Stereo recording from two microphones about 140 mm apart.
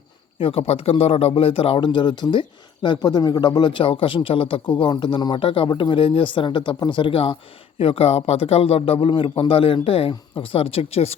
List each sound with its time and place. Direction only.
0.3 s a man's voice: 40° left (ahead or behind)